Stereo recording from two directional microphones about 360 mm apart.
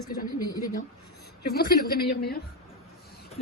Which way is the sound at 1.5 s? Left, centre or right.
Left.